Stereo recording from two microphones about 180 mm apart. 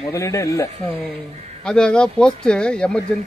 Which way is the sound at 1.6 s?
5° left (ahead or behind).